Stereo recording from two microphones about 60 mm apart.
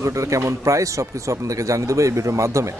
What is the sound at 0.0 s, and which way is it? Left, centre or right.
A man's voice, right.